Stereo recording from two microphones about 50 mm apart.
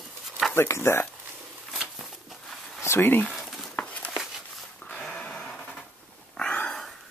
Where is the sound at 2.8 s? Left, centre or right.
Left.